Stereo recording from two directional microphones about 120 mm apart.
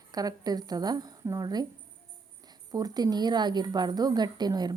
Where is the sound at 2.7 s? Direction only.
30° right (ahead or behind).